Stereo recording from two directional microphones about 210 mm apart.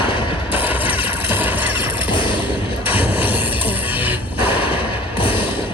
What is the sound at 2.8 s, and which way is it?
Music, 10° right (ahead or behind).